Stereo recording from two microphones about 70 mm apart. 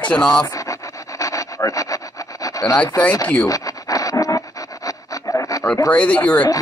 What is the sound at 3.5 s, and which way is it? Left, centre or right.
Pant, left.